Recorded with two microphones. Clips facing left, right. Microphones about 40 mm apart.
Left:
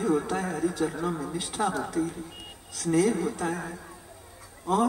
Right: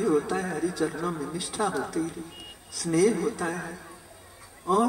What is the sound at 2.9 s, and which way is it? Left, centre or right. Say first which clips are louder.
Speech: right 2 dB; left.